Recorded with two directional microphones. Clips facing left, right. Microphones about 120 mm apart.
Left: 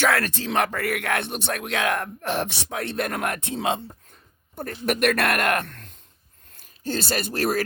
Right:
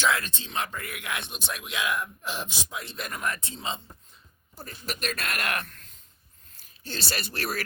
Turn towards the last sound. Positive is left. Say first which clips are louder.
# left 8 dB
turn(degrees=45)  # may be behind; listen again after turning